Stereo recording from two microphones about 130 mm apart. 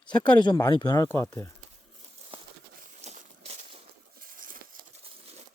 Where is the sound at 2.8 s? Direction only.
75° right (ahead or behind).